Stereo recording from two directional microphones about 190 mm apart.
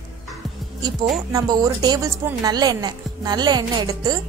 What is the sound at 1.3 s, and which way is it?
A woman's voice, 20° right (ahead or behind).